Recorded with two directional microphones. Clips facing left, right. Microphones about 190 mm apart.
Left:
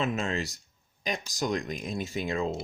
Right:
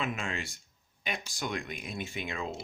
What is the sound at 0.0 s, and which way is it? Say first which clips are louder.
Speech: left 6 dB; 40° left (ahead or behind).